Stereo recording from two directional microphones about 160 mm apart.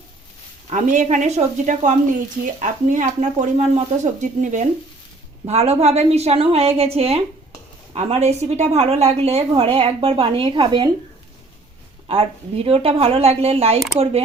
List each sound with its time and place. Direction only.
0.7 s a woman's voice: 50° right (ahead or behind); by 10.8 s 30° right (ahead or behind)
12.0 s a woman's voice: 35° right (ahead or behind)